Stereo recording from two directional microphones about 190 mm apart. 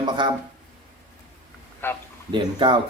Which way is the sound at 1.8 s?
10° left (ahead or behind).